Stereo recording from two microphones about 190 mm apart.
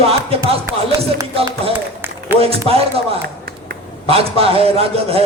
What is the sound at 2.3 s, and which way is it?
A man's voice, 30° right (ahead or behind).